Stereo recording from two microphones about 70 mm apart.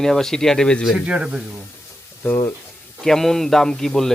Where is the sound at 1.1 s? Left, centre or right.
Centre.